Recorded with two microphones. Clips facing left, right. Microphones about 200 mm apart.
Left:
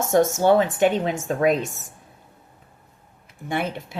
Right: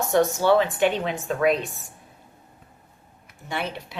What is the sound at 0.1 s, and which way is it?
Speech, 45° left (ahead or behind).